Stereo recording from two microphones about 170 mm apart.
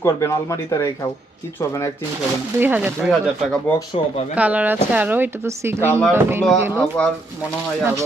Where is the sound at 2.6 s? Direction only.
10° right (ahead or behind).